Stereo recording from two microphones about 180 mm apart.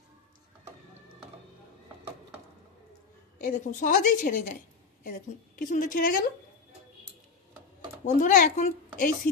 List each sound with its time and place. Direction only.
3.4 s a woman's voice: 45° left (ahead or behind)
8.0 s a woman's voice: 40° left (ahead or behind)